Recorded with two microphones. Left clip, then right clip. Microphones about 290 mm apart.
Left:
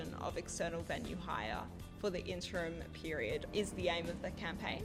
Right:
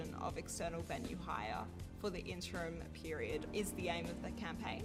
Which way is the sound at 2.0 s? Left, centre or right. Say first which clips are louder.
Left 4 dB; left.